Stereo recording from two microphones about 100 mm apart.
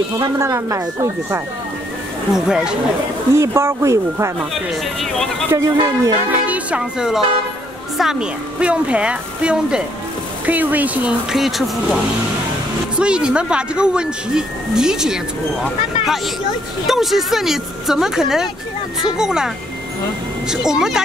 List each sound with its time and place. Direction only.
0.4 s speech: 30° right (ahead or behind)
2.3 s speech: 5° right (ahead or behind)
3.3 s speech: 25° right (ahead or behind)
5.5 s speech: 35° right (ahead or behind)
6.1 s speech: 15° right (ahead or behind)
11.3 s speech: centre (ahead or behind)
13.0 s speech: 10° right (ahead or behind)
16.8 s speech: centre (ahead or behind)